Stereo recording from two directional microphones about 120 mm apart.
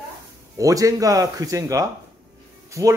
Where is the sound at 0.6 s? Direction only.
30° right (ahead or behind).